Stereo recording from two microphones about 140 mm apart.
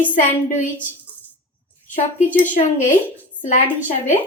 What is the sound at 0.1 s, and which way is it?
Speech, 65° left (ahead or behind).